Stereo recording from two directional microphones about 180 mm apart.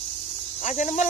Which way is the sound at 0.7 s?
45° left (ahead or behind).